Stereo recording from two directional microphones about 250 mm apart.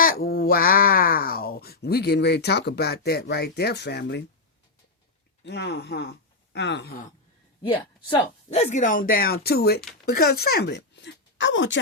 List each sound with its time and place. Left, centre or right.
0.0 s speech: left
5.5 s speech: left
7.6 s speech: centre; by 11.8 s left